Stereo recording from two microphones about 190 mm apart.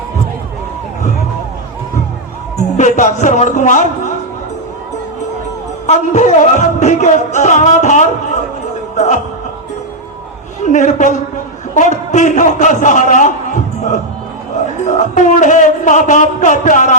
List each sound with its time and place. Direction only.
2.7 s speech: 40° left (ahead or behind)
5.8 s music: 40° left (ahead or behind)
10.6 s a man's voice: 40° left (ahead or behind)
14.8 s music: 40° left (ahead or behind)